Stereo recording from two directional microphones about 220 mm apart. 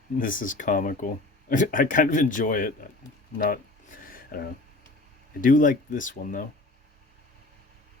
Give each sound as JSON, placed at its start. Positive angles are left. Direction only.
{"t": 0.2, "sound": "speech", "side_deg": 40}
{"t": 4.0, "sound": "a sound", "side_deg": 40}
{"t": 5.4, "sound": "speech", "side_deg": 40}